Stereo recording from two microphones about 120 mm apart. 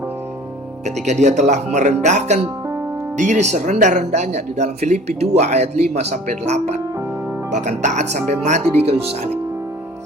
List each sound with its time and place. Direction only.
0.9 s speech: 75° right (ahead or behind)
3.2 s speech: 85° right
7.5 s speech: 85° right; by 9.4 s 60° right (ahead or behind)